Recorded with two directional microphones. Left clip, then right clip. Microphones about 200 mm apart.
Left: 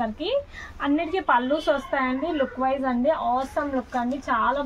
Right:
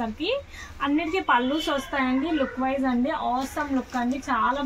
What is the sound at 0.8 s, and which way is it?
Speech, 45° left (ahead or behind).